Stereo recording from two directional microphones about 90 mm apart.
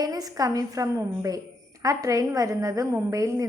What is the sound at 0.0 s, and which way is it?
A woman's voice, 45° right (ahead or behind).